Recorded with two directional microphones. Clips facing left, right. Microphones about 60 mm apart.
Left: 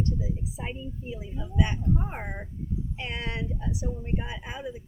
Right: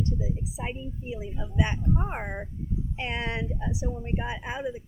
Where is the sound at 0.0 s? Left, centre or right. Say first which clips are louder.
Even; centre.